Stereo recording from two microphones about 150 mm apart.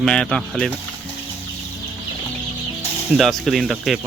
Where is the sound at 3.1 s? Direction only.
Centre (ahead or behind).